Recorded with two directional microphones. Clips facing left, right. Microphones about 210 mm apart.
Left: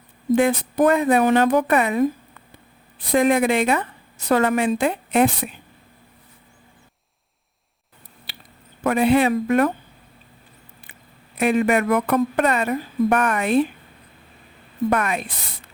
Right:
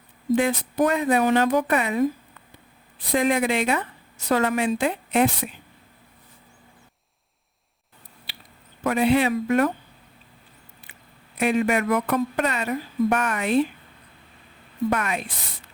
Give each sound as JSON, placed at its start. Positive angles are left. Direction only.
{"t": 0.3, "sound": "speech", "side_deg": 55}
{"t": 3.1, "sound": "a woman's voice", "side_deg": 55}
{"t": 8.8, "sound": "a woman's voice", "side_deg": 55}
{"t": 11.3, "sound": "a woman's voice", "side_deg": 55}
{"t": 14.8, "sound": "a woman's voice", "side_deg": 55}